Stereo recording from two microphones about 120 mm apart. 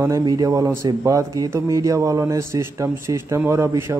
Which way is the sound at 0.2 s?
30° right (ahead or behind).